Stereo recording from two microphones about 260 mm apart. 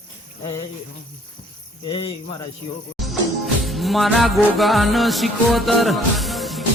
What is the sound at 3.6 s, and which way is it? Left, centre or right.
Music, centre.